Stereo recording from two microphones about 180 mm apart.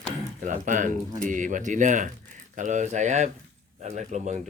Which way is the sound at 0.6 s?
45° right (ahead or behind).